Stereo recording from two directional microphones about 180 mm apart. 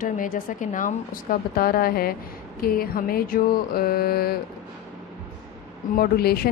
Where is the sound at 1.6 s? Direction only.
55° left (ahead or behind).